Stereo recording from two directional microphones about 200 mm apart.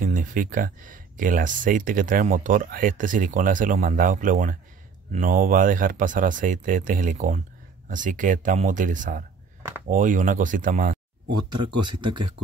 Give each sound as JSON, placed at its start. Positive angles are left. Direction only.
{"t": 0.0, "sound": "speech", "side_deg": -40}
{"t": 11.6, "sound": "speech", "side_deg": -25}